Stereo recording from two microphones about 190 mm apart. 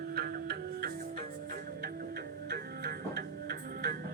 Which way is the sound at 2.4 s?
55° right (ahead or behind).